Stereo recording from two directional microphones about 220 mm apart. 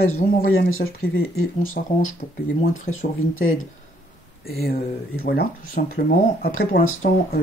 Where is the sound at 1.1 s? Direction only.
70° left (ahead or behind).